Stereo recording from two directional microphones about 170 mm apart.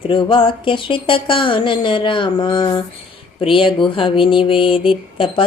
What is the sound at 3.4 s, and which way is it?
Speech, 30° left (ahead or behind).